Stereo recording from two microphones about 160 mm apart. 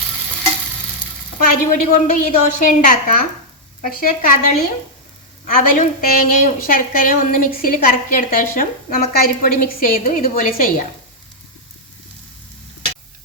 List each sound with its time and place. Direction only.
1.4 s a woman's voice: 60° left (ahead or behind)
5.5 s a woman's voice: 60° left (ahead or behind)